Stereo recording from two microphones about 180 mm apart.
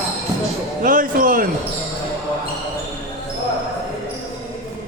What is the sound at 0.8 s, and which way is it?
Speech, 50° right (ahead or behind).